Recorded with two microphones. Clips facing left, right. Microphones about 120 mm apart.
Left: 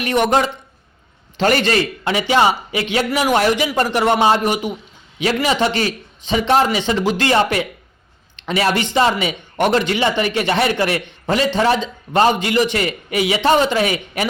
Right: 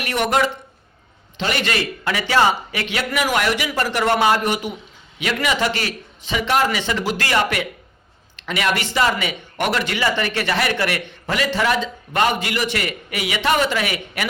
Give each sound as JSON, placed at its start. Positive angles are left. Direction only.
{"t": 0.0, "sound": "a man's voice", "side_deg": 25}
{"t": 1.4, "sound": "a man's voice", "side_deg": 40}
{"t": 5.2, "sound": "a man's voice", "side_deg": 30}